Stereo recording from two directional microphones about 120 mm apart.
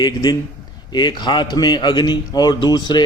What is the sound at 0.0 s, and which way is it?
A man's voice, 35° left (ahead or behind).